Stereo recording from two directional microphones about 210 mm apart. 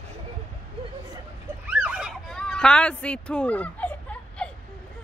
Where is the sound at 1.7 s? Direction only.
5° right (ahead or behind).